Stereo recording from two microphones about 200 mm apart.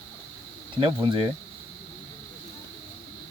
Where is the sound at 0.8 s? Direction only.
25° right (ahead or behind).